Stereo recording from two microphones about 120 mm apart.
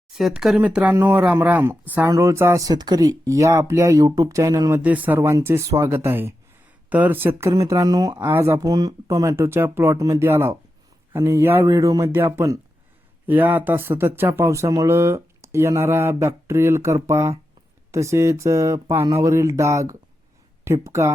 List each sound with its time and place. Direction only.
0.1 s speech: 5° right (ahead or behind)
2.0 s speech: 25° right (ahead or behind)
4.8 s speech: 15° right (ahead or behind); by 8.2 s 35° right (ahead or behind)
8.2 s speech: 20° right (ahead or behind)